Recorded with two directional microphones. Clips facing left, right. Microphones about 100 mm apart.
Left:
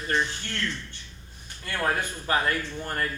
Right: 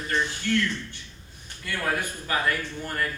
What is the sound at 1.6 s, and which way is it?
A man's voice, 45° left (ahead or behind).